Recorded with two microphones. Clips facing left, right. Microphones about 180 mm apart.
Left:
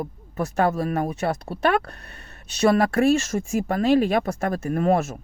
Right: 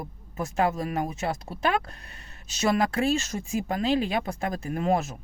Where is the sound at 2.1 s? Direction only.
35° left (ahead or behind).